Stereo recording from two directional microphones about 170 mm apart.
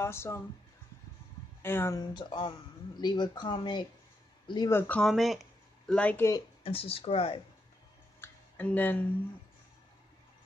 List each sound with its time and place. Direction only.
0.0 s speech: 15° left (ahead or behind)
1.6 s speech: 15° left (ahead or behind)
2.1 s speech: 25° left (ahead or behind)
6.6 s speech: 35° left (ahead or behind)
8.2 s a sound: 10° left (ahead or behind)